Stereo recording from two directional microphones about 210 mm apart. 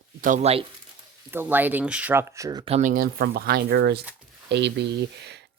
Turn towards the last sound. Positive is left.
turn(degrees=-55)  # may be behind; listen again after turning